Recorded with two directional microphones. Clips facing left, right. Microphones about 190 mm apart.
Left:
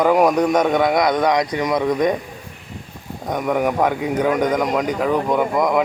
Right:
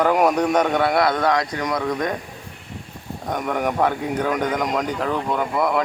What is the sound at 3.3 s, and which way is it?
Speech, 5° left (ahead or behind).